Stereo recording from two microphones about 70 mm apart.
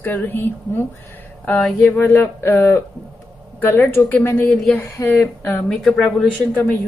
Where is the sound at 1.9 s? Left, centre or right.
Left.